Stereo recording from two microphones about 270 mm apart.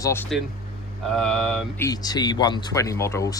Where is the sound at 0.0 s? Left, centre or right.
Centre.